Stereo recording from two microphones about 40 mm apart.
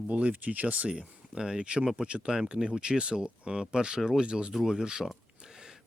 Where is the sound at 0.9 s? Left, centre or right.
Centre.